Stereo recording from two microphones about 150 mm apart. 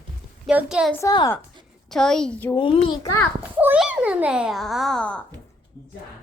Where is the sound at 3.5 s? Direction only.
10° right (ahead or behind); by 5.2 s 5° left (ahead or behind).